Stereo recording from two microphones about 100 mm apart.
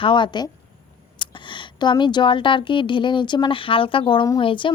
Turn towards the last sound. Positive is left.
turn(degrees=55)  # may be behind; listen again after turning